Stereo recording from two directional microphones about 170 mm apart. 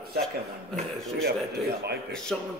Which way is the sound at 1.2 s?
70° right (ahead or behind).